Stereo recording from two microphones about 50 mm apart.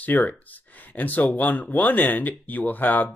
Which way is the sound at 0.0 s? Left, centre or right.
Left.